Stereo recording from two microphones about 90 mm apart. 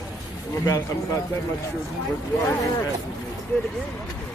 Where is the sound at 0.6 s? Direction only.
35° left (ahead or behind).